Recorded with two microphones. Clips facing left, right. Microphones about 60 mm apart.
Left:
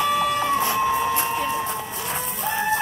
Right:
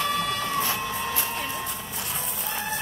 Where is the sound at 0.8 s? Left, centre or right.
Left.